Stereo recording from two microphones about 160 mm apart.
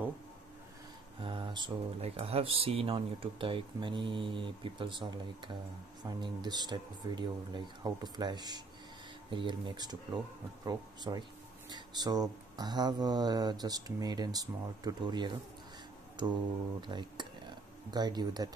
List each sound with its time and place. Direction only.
1.2 s speech: 30° right (ahead or behind)